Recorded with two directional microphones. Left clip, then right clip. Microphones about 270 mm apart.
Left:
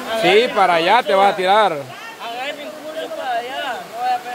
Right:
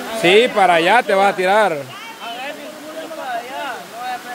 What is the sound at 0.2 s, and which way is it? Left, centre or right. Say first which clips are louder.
Speech: right 2 dB; centre.